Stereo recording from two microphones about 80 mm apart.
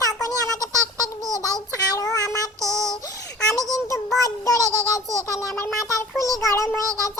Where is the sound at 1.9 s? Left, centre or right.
Left.